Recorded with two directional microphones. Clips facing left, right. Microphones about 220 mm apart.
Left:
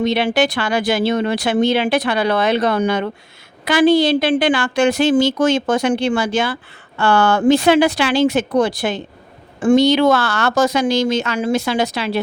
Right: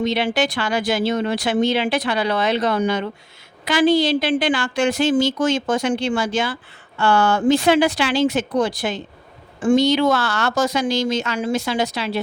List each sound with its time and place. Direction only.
0.0 s speech: 65° left (ahead or behind)
10.7 s speech: 70° left (ahead or behind)